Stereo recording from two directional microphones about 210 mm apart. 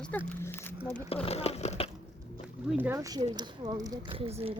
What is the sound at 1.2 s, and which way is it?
Speech, 30° left (ahead or behind).